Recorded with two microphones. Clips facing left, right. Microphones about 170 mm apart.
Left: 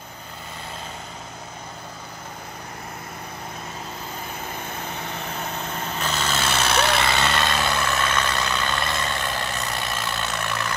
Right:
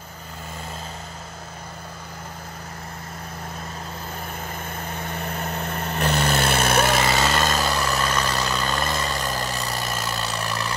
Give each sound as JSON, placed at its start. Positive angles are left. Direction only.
{"t": 5.4, "sound": "vehicle", "side_deg": -60}